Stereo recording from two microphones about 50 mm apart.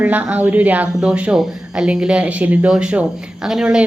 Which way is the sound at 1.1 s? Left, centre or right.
Right.